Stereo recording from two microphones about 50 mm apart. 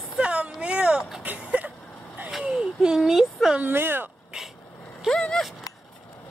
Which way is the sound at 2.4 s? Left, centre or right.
Centre.